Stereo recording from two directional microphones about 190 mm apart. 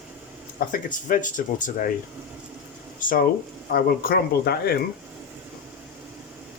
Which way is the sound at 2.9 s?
45° left (ahead or behind).